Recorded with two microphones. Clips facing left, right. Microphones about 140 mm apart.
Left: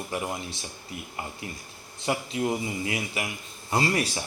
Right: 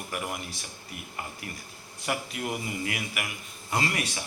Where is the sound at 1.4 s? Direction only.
25° left (ahead or behind).